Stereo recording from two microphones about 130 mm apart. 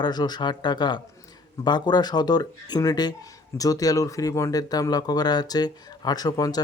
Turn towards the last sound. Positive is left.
turn(degrees=30)  # may be behind; listen again after turning